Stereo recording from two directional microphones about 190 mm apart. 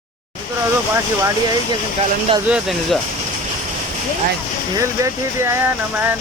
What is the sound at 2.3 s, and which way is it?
Speech, 30° right (ahead or behind).